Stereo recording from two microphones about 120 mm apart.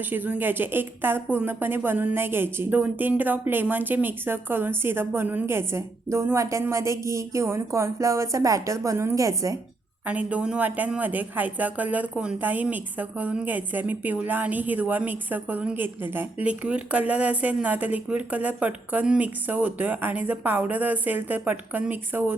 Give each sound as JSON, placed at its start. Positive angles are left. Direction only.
{"t": 0.1, "sound": "a woman's voice", "side_deg": -15}
{"t": 10.1, "sound": "speech", "side_deg": -10}